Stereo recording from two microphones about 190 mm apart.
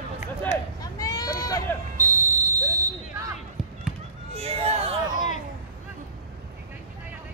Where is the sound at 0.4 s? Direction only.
15° left (ahead or behind).